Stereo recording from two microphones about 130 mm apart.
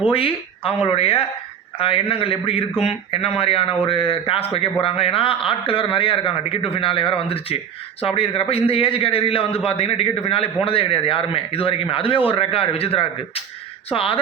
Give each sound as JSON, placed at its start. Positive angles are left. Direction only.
{"t": 0.1, "sound": "a man's voice", "side_deg": 45}